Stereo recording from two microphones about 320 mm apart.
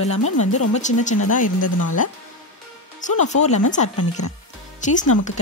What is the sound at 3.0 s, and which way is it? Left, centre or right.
Speech, left.